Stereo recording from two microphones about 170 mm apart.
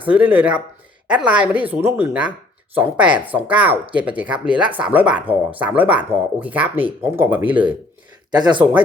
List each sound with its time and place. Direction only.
0.0 s speech: 10° right (ahead or behind)
8.4 s speech: 25° right (ahead or behind)